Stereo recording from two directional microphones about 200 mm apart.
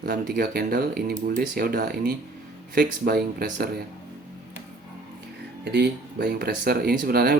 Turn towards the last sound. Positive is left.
turn(degrees=-50)  # may be behind; listen again after turning